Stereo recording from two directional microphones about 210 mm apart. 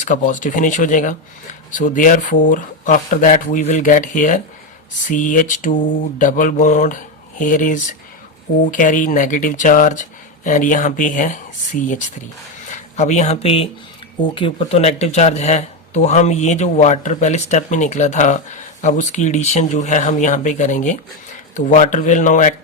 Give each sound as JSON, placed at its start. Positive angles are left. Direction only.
{"t": 0.0, "sound": "speech", "side_deg": 35}